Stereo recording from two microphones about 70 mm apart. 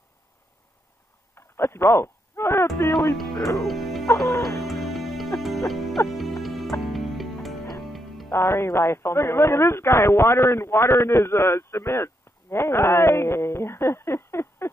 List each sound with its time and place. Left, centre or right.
1.3 s a sound: left
3.5 s music: centre
4.3 s music: left
4.6 s music: centre
8.3 s speech: left